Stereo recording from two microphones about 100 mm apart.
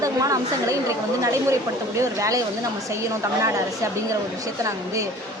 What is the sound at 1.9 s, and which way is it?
Speech, 30° right (ahead or behind).